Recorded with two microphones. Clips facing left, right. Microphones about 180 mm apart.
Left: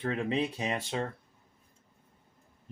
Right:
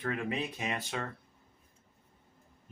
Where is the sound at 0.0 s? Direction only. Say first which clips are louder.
Left 4 dB; 25° left (ahead or behind).